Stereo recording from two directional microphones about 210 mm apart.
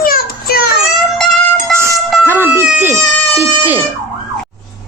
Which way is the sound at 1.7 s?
10° right (ahead or behind).